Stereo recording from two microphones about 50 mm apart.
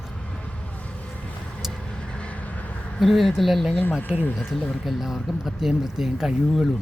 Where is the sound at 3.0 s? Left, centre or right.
Centre.